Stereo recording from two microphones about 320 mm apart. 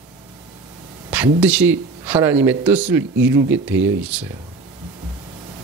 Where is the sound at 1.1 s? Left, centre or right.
Centre.